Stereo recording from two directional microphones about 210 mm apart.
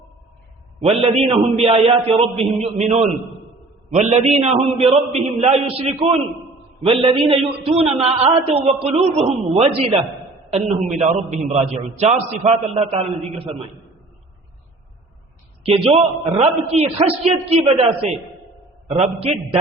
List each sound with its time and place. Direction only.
0.8 s a man's voice: 30° right (ahead or behind)
15.6 s a man's voice: 30° right (ahead or behind)
18.9 s a man's voice: 25° right (ahead or behind)